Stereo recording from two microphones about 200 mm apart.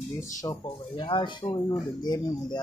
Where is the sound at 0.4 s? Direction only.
15° left (ahead or behind).